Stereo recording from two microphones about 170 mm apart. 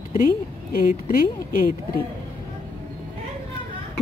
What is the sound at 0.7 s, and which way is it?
Speech, 60° left (ahead or behind).